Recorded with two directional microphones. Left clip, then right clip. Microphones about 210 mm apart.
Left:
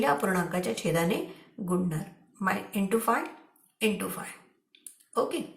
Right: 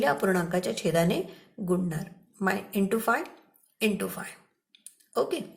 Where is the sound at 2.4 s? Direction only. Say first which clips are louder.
Right 2 dB; 45° right (ahead or behind).